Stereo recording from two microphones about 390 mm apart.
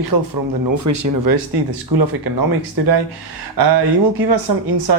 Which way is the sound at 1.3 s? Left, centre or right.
Right.